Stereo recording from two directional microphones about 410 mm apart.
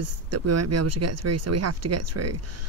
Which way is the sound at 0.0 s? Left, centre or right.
Right.